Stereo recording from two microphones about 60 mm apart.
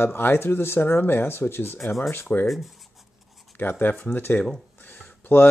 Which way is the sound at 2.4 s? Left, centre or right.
Centre.